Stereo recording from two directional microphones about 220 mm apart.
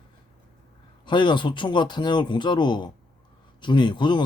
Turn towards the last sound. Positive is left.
turn(degrees=20)  # may be behind; listen again after turning